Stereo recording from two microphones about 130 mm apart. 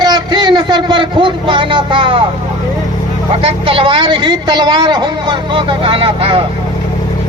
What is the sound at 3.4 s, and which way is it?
A woman's voice, 45° right (ahead or behind).